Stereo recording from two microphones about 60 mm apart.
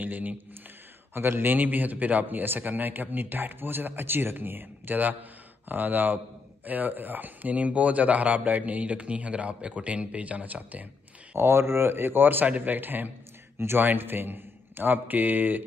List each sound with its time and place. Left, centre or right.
0.0 s a man's voice: right
11.3 s a man's voice: right